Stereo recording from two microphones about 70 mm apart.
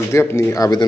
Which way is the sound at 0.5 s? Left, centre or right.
Left.